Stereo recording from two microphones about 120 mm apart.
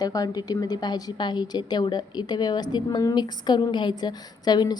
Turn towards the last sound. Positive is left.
turn(degrees=35)  # may be behind; listen again after turning